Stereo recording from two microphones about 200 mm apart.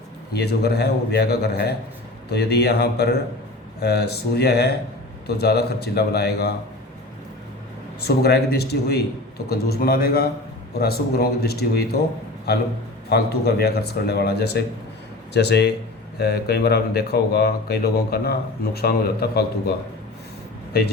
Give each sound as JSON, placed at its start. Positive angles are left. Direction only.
{"t": 0.3, "sound": "a man's voice", "side_deg": 55}
{"t": 8.0, "sound": "speech", "side_deg": 55}
{"t": 13.1, "sound": "a man's voice", "side_deg": 55}